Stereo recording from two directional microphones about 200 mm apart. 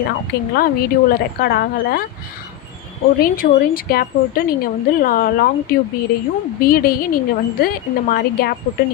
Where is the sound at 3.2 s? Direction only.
45° left (ahead or behind).